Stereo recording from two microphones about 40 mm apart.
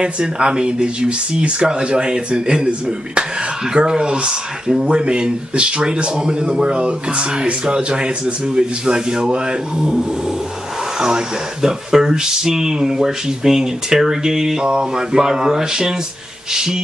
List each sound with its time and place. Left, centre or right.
0.0 s speech: right
3.7 s speech: centre